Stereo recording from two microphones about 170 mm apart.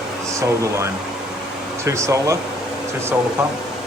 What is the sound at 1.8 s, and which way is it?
Speech, 15° right (ahead or behind).